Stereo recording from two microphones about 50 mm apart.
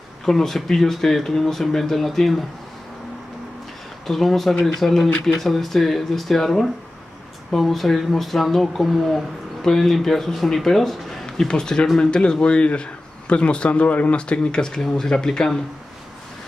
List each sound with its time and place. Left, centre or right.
0.2 s speech: centre
4.1 s speech: centre